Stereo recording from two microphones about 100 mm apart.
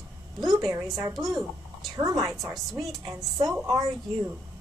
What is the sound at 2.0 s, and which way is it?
Speech, 35° right (ahead or behind).